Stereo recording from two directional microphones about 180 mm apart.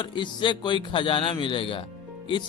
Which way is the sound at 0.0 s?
25° left (ahead or behind).